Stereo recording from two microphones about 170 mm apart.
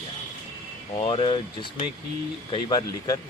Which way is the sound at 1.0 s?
30° left (ahead or behind).